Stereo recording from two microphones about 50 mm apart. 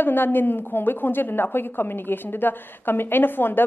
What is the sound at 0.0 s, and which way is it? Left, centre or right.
A woman's voice, left.